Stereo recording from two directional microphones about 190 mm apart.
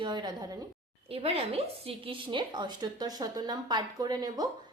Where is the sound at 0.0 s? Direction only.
25° right (ahead or behind).